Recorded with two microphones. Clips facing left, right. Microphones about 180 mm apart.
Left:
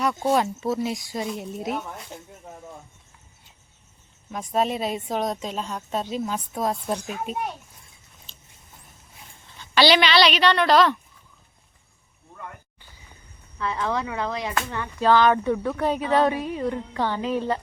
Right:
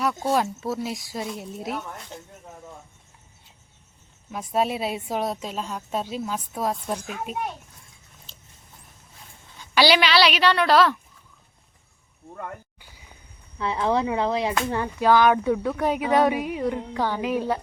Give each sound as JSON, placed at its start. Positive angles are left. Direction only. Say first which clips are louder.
{"t": 0.0, "sound": "speech", "louder": "left 1 dB", "side_deg": 0}
{"t": 2.1, "sound": "a sound", "louder": "even", "side_deg": 10}
{"t": 4.3, "sound": "a woman's voice", "louder": "even", "side_deg": -5}
{"t": 9.6, "sound": "a woman's voice", "louder": "left 1 dB", "side_deg": -10}
{"t": 13.6, "sound": "speech", "louder": "right 3 dB", "side_deg": -25}
{"t": 14.9, "sound": "a woman's voice", "louder": "even", "side_deg": -10}